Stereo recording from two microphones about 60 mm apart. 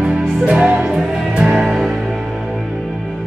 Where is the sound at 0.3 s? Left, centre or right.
Centre.